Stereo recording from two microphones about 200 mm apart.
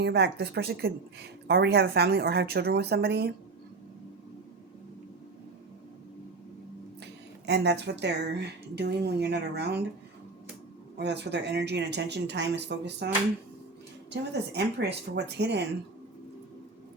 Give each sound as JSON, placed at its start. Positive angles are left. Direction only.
{"t": 0.0, "sound": "speech", "side_deg": -55}
{"t": 7.0, "sound": "speech", "side_deg": -60}
{"t": 10.9, "sound": "speech", "side_deg": -60}
{"t": 14.1, "sound": "speech", "side_deg": -55}